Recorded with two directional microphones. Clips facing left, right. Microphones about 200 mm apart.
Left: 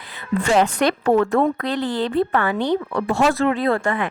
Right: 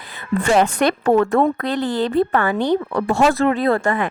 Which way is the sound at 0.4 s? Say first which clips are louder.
Right 1 dB; 50° right (ahead or behind).